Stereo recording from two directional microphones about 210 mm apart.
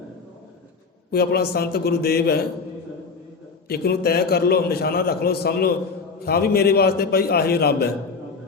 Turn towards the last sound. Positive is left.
turn(degrees=50)  # may be behind; listen again after turning